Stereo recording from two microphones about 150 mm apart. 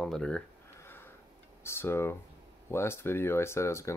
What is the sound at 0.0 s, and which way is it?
Speech, 5° left (ahead or behind).